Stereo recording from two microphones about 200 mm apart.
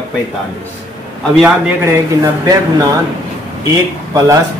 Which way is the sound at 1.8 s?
15° right (ahead or behind).